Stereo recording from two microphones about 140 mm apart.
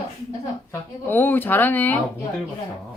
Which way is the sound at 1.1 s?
15° left (ahead or behind).